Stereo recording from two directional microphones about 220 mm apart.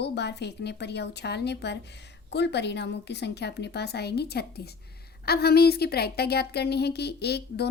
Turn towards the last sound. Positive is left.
turn(degrees=50)  # may be behind; listen again after turning